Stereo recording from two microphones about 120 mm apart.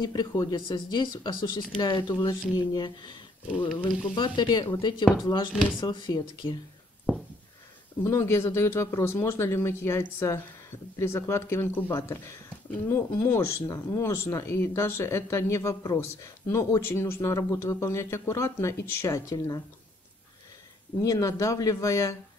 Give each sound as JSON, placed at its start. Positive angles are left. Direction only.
{"t": 0.0, "sound": "speech", "side_deg": 40}
{"t": 5.5, "sound": "speech", "side_deg": -5}
{"t": 5.9, "sound": "speech", "side_deg": 40}
{"t": 7.1, "sound": "a sound", "side_deg": -5}
{"t": 8.0, "sound": "speech", "side_deg": 20}
{"t": 21.0, "sound": "speech", "side_deg": 30}